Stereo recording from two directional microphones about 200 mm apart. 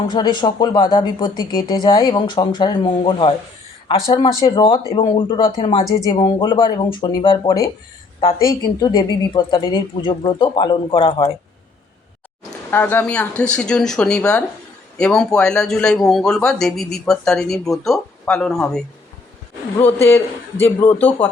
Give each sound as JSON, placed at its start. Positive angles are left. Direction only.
{"t": 0.1, "sound": "speech", "side_deg": 20}
{"t": 12.7, "sound": "speech", "side_deg": 10}
{"t": 19.8, "sound": "a man's voice", "side_deg": 10}